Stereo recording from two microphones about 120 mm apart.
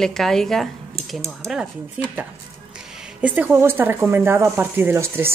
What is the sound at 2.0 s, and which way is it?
Speech, 10° right (ahead or behind).